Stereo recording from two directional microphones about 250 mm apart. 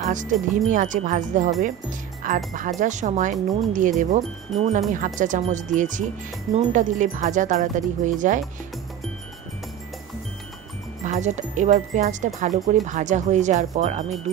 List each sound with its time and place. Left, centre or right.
0.1 s speech: right
11.1 s speech: right